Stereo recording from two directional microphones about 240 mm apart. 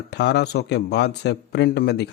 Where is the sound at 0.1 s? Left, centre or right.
Left.